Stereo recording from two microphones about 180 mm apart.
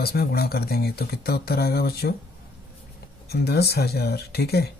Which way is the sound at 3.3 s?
65° left (ahead or behind).